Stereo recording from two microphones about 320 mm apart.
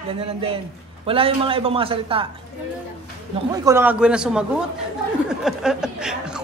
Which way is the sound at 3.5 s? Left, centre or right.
Centre.